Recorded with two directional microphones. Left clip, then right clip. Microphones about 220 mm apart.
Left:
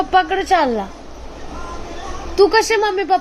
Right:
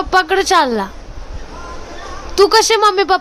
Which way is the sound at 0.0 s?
30° right (ahead or behind).